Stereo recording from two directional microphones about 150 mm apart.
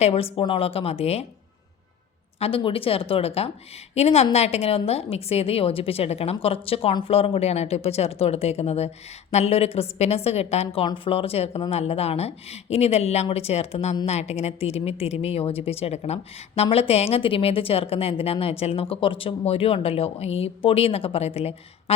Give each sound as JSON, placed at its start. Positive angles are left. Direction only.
{"t": 0.0, "sound": "speech", "side_deg": 40}
{"t": 2.4, "sound": "a woman's voice", "side_deg": 35}